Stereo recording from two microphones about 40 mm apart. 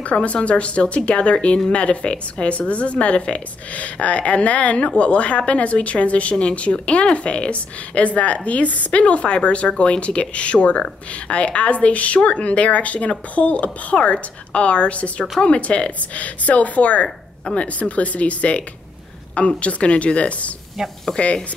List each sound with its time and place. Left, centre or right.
0.0 s a woman's voice: left